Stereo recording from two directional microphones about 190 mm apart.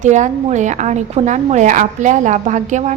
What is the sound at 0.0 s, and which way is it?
A woman's voice, 40° right (ahead or behind).